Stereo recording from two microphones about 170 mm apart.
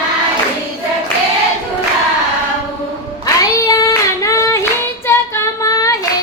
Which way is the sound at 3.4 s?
20° left (ahead or behind).